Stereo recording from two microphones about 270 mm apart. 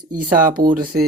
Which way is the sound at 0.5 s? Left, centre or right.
Right.